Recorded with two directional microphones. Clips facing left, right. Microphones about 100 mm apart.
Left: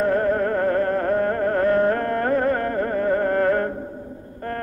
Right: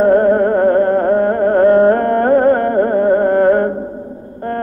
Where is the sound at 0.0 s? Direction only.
35° right (ahead or behind).